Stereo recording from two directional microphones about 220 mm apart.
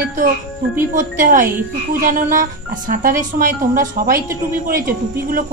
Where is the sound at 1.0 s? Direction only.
35° right (ahead or behind).